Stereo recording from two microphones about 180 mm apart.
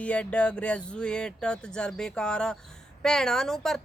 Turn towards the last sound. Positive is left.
turn(degrees=0)  # may be behind; listen again after turning